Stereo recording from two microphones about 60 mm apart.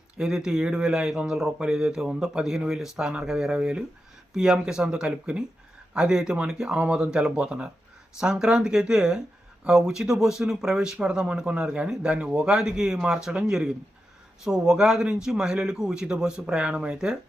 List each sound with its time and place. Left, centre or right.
0.2 s speech: centre